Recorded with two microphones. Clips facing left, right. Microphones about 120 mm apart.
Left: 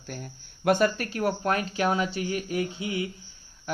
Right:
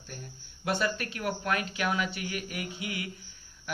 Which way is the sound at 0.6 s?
50° left (ahead or behind).